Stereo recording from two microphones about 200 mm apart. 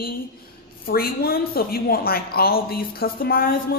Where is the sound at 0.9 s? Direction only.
50° left (ahead or behind).